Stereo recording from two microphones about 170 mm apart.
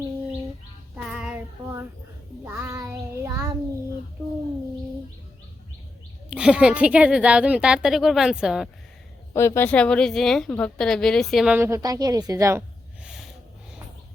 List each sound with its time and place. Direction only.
0.9 s child singing: 5° right (ahead or behind)
6.3 s a woman's voice: 5° right (ahead or behind)
9.3 s a woman's voice: 15° left (ahead or behind); by 12.6 s 15° right (ahead or behind)